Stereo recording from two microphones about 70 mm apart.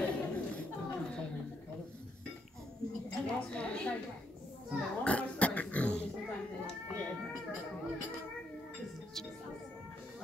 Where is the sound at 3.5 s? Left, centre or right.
Centre.